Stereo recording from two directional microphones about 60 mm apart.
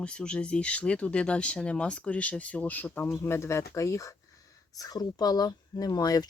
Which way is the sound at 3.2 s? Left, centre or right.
Left.